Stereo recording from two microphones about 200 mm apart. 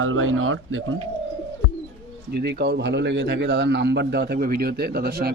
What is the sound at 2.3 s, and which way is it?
A man's voice, 55° right (ahead or behind).